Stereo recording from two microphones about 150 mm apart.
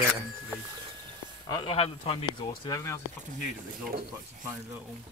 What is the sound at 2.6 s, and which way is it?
Speech, 20° left (ahead or behind).